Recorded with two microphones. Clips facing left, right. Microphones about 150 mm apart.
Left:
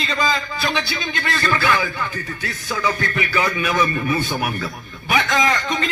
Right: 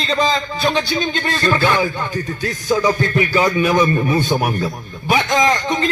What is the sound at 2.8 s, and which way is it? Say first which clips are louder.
A man's voice: right 6 dB; 35° right (ahead or behind).